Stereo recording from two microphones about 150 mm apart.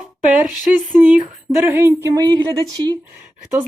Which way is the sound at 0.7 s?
10° right (ahead or behind).